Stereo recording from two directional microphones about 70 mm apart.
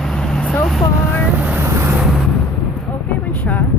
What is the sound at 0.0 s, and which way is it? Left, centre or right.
Vehicle, centre.